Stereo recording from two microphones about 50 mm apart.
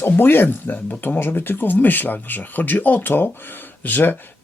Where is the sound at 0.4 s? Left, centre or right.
Left.